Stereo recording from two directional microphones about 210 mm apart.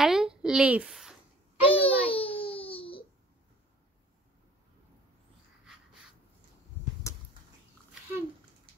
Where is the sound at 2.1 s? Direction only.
25° left (ahead or behind).